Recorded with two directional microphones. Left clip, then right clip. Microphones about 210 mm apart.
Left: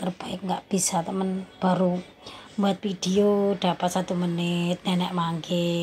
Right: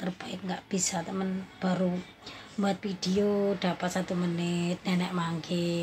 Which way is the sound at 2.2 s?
15° left (ahead or behind).